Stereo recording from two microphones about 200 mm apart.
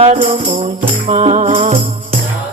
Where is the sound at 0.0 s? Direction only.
30° right (ahead or behind).